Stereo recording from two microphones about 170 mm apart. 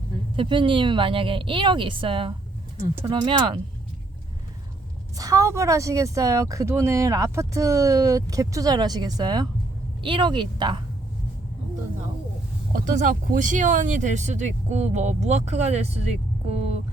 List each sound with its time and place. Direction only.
0.3 s a woman's voice: 30° right (ahead or behind)
5.1 s speech: 20° right (ahead or behind)
12.7 s speech: 50° right (ahead or behind)